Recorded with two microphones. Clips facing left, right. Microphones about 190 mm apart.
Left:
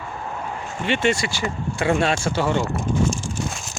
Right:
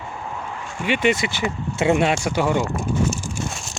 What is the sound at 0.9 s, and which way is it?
Speech, 15° right (ahead or behind).